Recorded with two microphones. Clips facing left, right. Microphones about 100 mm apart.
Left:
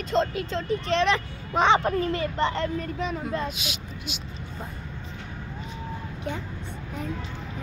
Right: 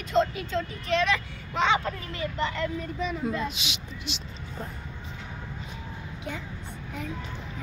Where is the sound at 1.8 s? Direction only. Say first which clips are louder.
Left 7 dB; 45° left (ahead or behind).